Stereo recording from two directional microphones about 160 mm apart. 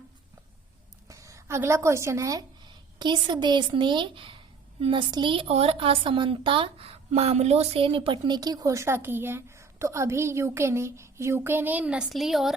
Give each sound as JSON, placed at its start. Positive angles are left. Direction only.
{"t": 1.0, "sound": "a woman's voice", "side_deg": -20}